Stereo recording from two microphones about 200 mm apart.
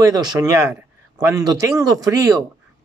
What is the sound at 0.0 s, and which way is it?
Speech, 20° right (ahead or behind).